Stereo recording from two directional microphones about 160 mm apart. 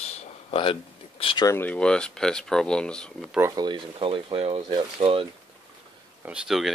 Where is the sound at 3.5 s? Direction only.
30° right (ahead or behind).